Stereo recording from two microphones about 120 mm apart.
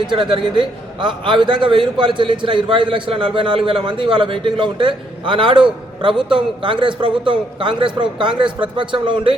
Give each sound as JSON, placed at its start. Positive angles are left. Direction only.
{"t": 0.1, "sound": "a man's voice", "side_deg": -40}